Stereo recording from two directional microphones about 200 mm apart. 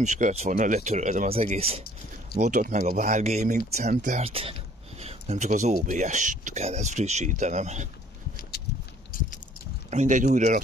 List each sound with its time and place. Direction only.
0.0 s speech: 35° right (ahead or behind)
9.1 s a sound: 45° left (ahead or behind)
9.8 s speech: 35° right (ahead or behind)